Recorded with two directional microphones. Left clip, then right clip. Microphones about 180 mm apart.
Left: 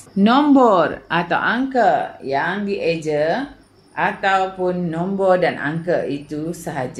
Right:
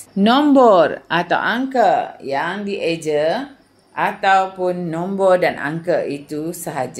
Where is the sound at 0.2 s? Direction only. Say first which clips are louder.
Right 1 dB; 35° right (ahead or behind).